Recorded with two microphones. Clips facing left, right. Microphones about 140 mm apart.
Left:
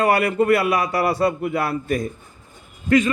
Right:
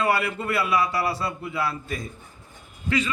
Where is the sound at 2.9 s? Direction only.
45° left (ahead or behind).